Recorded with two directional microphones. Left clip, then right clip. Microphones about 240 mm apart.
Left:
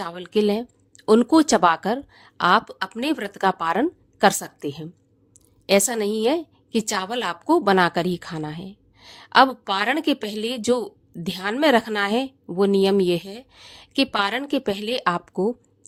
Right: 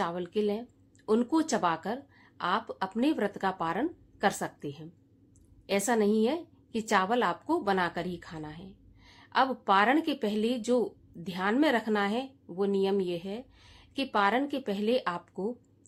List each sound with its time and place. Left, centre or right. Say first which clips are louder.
0.0 s a woman's voice: left 7 dB; left
5.9 s a woman's voice: left 5 dB; left